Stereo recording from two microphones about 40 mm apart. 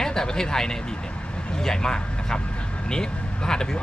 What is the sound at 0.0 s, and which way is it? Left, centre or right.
Speech, centre.